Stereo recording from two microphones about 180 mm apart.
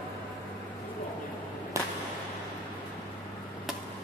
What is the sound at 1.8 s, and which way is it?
Whip, 15° right (ahead or behind).